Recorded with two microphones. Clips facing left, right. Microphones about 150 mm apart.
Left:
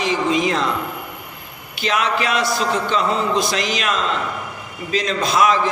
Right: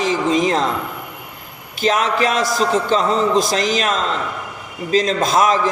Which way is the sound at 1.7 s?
45° right (ahead or behind).